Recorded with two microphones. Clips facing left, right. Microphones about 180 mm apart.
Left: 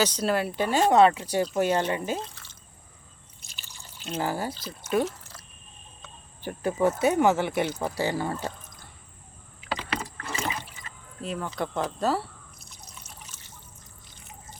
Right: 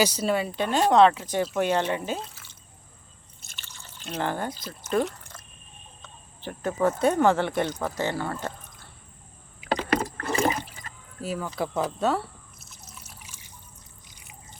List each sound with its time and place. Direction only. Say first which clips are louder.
0.0 s speech: right 1 dB; 5° right (ahead or behind)
3.7 s drip: left 1 dB; 10° left (ahead or behind)
4.6 s speech: even; 5° left (ahead or behind)
9.6 s water: right 7 dB; 45° right (ahead or behind)
11.2 s drip: right 1 dB; 5° right (ahead or behind)